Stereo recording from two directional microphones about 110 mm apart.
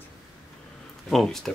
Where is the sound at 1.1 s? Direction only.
Centre (ahead or behind).